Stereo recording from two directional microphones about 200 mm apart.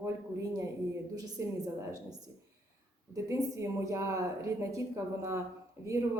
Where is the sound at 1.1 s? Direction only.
15° right (ahead or behind).